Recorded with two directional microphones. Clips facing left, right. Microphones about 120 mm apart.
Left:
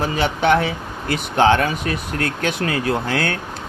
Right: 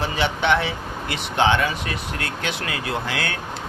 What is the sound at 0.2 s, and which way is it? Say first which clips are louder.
Speech: left 3 dB; 40° left (ahead or behind).